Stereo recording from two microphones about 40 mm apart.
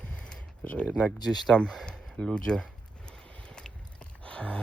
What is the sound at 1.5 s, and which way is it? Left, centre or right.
Speech, left.